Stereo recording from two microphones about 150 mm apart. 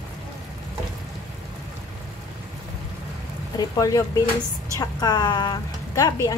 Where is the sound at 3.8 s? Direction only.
25° left (ahead or behind).